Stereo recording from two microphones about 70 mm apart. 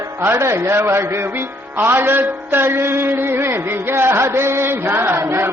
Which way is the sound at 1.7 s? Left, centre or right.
Right.